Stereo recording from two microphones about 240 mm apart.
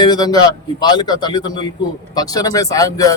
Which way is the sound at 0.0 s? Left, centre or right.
Centre.